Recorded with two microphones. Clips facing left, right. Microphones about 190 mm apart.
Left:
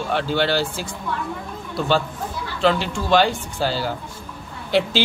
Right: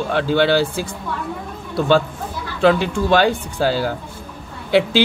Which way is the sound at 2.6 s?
55° right (ahead or behind).